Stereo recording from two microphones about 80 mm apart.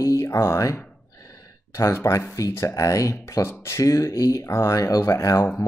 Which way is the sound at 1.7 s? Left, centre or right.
Left.